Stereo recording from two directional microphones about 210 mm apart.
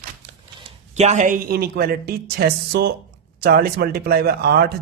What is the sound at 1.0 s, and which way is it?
A man's voice, 35° right (ahead or behind).